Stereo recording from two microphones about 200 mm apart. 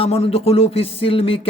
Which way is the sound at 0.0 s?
30° left (ahead or behind).